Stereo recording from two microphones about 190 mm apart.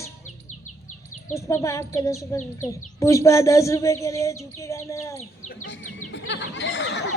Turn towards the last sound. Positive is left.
turn(degrees=70)  # may be behind; listen again after turning